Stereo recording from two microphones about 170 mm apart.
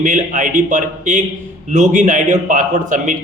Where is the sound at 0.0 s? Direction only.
50° right (ahead or behind).